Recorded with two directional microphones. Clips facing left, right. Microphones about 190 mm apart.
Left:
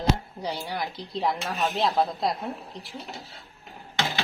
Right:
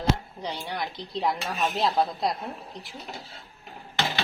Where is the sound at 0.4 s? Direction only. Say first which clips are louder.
Left 1 dB; 5° left (ahead or behind).